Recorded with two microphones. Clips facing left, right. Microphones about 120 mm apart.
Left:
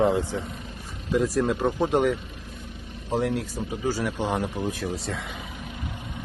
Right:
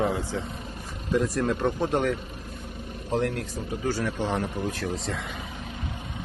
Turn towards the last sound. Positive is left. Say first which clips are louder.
# left 1 dB
turn(degrees=15)  # may be behind; listen again after turning